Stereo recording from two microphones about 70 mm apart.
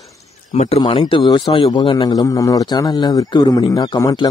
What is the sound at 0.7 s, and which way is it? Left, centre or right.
A man's voice, left.